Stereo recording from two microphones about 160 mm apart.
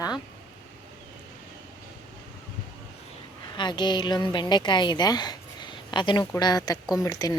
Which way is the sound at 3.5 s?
30° left (ahead or behind).